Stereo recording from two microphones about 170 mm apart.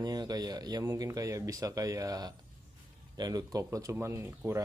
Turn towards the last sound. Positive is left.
turn(degrees=-15)  # may be behind; listen again after turning